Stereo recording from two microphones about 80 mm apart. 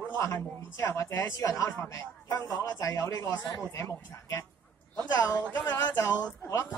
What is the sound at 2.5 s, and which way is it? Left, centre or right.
Speech, left.